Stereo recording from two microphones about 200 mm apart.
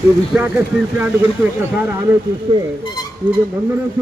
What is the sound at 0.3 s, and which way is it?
Speech, 10° right (ahead or behind).